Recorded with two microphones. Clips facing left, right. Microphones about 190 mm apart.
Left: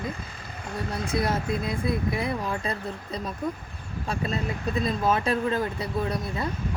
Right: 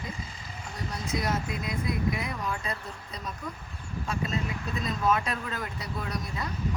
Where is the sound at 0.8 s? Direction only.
60° left (ahead or behind).